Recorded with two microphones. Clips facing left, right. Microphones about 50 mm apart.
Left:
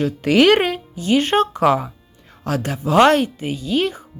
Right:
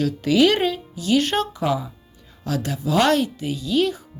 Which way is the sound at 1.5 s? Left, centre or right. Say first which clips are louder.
Left 7 dB; left.